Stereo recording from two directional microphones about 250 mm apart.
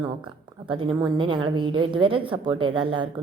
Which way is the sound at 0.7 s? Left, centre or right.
Centre.